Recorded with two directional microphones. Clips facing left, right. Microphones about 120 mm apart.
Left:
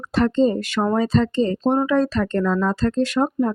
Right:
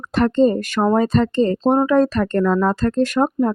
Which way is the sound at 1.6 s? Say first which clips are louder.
Right 4 dB; 35° right (ahead or behind).